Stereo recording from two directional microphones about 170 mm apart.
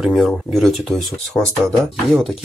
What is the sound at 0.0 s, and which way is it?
Speech, centre (ahead or behind).